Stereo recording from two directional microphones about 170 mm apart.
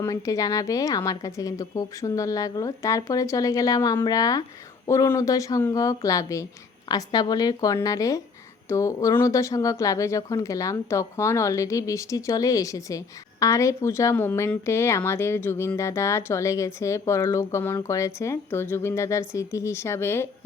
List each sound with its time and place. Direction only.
0.0 s a woman's voice: 20° left (ahead or behind)